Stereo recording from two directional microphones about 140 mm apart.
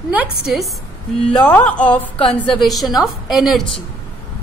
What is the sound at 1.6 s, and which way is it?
A woman's voice, 10° left (ahead or behind).